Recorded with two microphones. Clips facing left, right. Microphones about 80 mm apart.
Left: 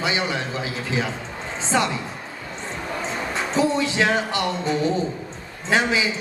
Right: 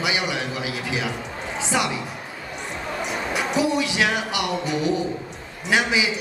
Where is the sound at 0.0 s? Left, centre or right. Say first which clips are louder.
Left 1 dB; centre.